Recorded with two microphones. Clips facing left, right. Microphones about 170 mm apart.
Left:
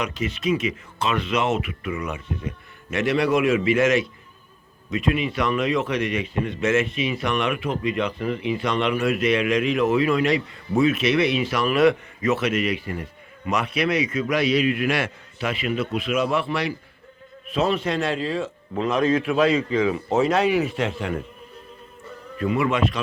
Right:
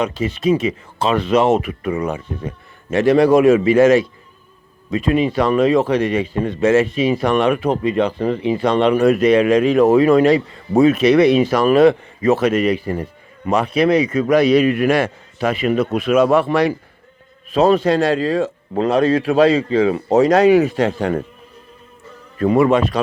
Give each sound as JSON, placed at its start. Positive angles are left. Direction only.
{"t": 0.0, "sound": "speech", "side_deg": -30}
{"t": 22.4, "sound": "speech", "side_deg": -40}